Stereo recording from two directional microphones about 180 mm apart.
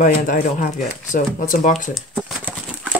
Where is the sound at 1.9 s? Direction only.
5° right (ahead or behind).